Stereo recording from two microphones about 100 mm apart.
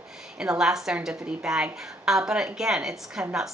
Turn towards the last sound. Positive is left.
turn(degrees=-5)  # may be behind; listen again after turning